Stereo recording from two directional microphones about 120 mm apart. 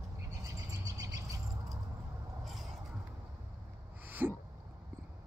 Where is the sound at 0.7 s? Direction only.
30° right (ahead or behind).